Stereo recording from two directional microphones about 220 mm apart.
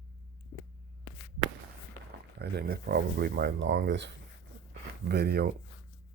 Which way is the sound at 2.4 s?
45° right (ahead or behind).